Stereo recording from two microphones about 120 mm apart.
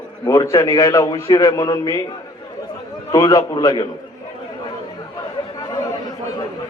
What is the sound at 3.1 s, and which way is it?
Speech, 35° left (ahead or behind).